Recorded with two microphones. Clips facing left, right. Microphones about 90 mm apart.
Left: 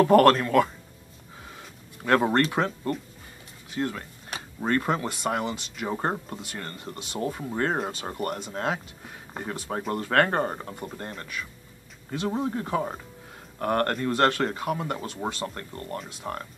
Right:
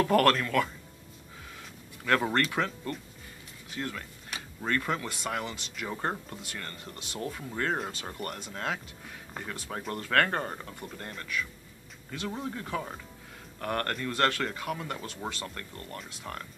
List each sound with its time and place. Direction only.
0.0 s speech: 25° left (ahead or behind)
2.0 s speech: 25° left (ahead or behind)